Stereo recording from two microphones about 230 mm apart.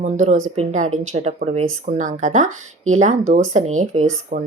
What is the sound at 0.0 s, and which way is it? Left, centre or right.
Speech, right.